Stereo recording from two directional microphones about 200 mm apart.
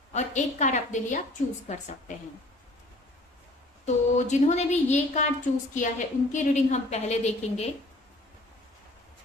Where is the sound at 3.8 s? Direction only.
35° left (ahead or behind).